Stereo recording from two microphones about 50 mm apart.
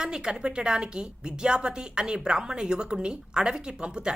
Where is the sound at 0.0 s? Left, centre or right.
Centre.